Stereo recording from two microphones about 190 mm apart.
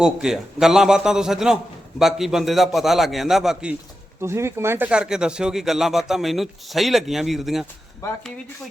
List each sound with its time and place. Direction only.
0.0 s speech: 5° right (ahead or behind)
8.0 s speech: 15° left (ahead or behind)